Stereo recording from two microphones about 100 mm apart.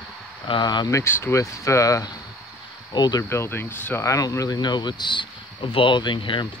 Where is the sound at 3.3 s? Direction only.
25° left (ahead or behind).